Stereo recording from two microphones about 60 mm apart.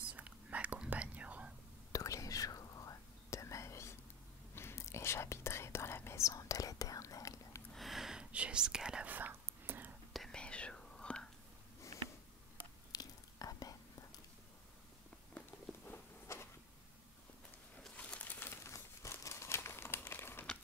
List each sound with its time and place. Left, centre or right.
0.1 s whispering: right
1.9 s whispering: left
6.2 s whispering: left
7.7 s a sound: centre
8.3 s whispering: centre
9.0 s whispering: right
10.3 s whispering: centre
12.9 s whispering: left
16.3 s insect: left
17.9 s a sound: left
18.5 s crumpling: left